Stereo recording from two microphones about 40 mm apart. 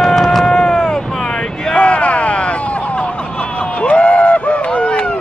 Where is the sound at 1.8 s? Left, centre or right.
Left.